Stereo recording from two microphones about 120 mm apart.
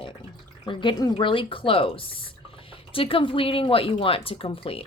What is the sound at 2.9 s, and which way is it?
A woman's voice, 50° left (ahead or behind).